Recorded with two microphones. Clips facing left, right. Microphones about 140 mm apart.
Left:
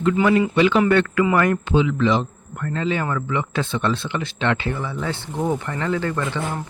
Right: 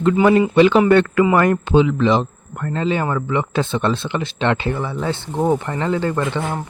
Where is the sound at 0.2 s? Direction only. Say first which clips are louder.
Right 5 dB; 25° right (ahead or behind).